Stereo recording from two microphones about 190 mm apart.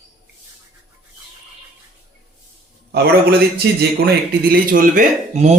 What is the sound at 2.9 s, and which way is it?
A man's voice, 55° right (ahead or behind).